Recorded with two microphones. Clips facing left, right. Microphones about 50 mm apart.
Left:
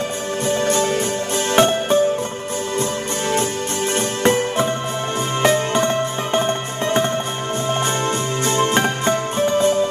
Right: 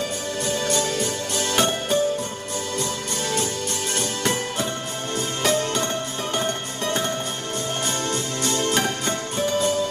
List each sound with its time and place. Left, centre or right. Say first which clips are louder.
0.5 s music: left 6 dB; left
8.1 s music: left 5 dB; left